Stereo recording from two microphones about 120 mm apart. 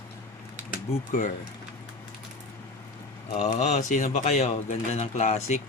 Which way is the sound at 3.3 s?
75° left (ahead or behind).